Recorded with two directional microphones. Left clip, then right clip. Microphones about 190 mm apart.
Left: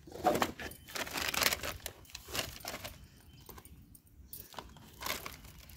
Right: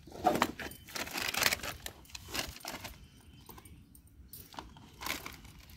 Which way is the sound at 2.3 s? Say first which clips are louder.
Even; 30° left (ahead or behind).